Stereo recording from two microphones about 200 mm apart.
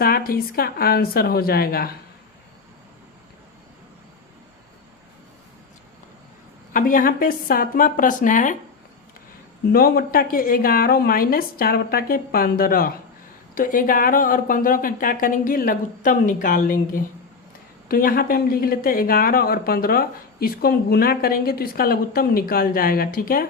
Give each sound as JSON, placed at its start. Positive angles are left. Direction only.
{"t": 0.0, "sound": "speech", "side_deg": 45}
{"t": 6.7, "sound": "speech", "side_deg": 45}
{"t": 9.7, "sound": "speech", "side_deg": 50}